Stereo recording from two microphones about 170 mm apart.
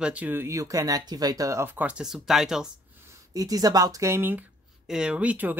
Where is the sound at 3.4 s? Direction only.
20° right (ahead or behind).